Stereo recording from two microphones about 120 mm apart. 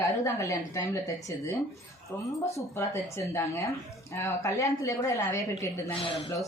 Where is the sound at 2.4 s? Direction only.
25° left (ahead or behind).